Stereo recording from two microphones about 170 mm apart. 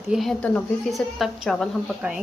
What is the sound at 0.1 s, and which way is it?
Speech, centre (ahead or behind).